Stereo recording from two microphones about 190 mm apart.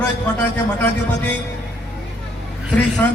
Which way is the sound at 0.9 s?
65° left (ahead or behind).